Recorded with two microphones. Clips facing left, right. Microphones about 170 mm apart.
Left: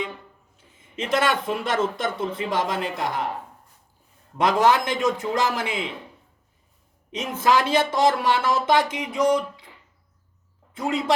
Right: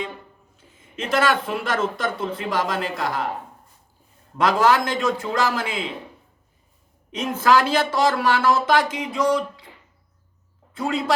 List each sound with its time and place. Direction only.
0.5 s a sound: 20° left (ahead or behind)
1.6 s a woman's voice: 20° left (ahead or behind)
4.4 s a woman's voice: 20° left (ahead or behind)
7.1 s a woman's voice: 20° left (ahead or behind)
10.8 s a woman's voice: 20° left (ahead or behind)